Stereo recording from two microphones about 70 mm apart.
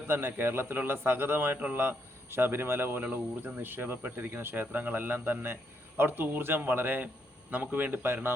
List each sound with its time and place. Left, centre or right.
0.1 s a man's voice: right